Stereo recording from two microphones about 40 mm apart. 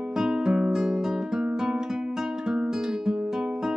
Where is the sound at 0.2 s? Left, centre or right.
Centre.